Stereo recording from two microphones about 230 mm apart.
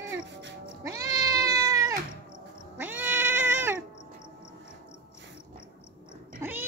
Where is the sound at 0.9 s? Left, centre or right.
Centre.